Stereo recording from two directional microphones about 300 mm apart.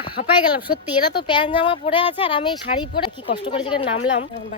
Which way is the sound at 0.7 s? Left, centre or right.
Centre.